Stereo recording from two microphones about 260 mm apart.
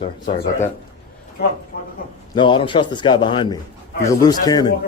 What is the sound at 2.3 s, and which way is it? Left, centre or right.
Speech, centre.